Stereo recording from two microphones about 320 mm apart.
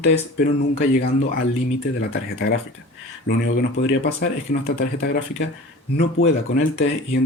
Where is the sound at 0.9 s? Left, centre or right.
Left.